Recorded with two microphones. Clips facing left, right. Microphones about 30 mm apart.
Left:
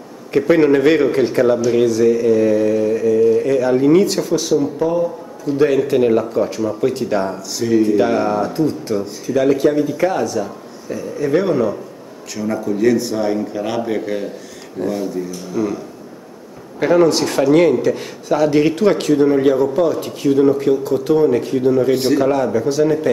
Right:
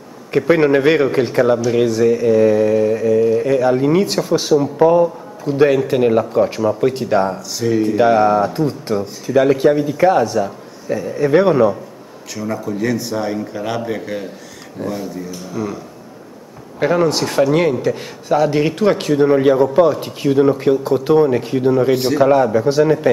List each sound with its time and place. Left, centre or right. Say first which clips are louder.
0.3 s a man's voice: even; centre
10.9 s a man's voice: right 3 dB; right
12.4 s a man's voice: left 2 dB; centre
16.8 s a man's voice: left 2 dB; centre
21.9 s a man's voice: left 1 dB; centre
22.2 s speech: right 3 dB; centre